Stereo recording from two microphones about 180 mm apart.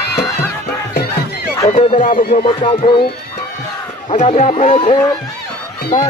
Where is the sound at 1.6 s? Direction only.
40° left (ahead or behind).